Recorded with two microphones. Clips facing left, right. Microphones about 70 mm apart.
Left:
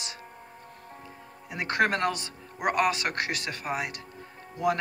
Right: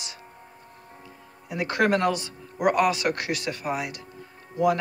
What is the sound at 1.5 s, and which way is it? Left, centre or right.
Speech, left.